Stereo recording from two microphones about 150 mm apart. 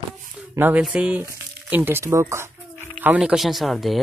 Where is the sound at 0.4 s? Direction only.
10° right (ahead or behind).